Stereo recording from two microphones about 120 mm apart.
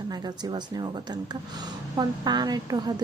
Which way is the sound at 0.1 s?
35° right (ahead or behind).